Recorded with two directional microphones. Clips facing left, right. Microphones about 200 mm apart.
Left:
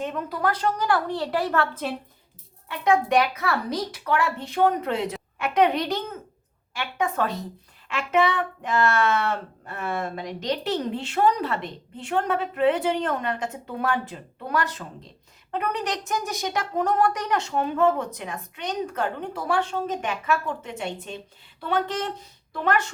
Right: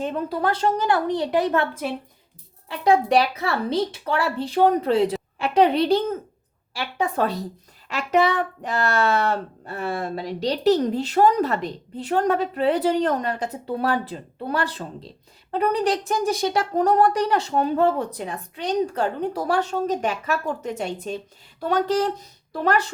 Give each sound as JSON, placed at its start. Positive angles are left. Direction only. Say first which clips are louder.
{"t": 0.0, "sound": "a woman's voice", "louder": "right 3 dB", "side_deg": -30}
{"t": 2.6, "sound": "speech", "louder": "right 3 dB", "side_deg": -35}